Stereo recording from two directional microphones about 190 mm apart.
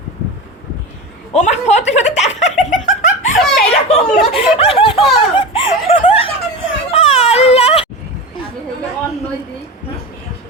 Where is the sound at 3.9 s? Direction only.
30° left (ahead or behind).